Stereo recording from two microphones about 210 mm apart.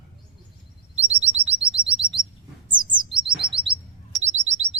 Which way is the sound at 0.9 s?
30° right (ahead or behind).